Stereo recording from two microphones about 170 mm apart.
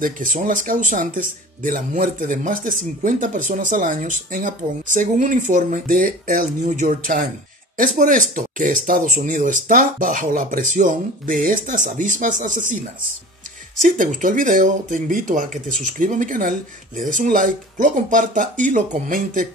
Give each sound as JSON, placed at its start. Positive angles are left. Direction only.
{"t": 0.0, "sound": "speech", "side_deg": -50}
{"t": 13.7, "sound": "speech", "side_deg": -50}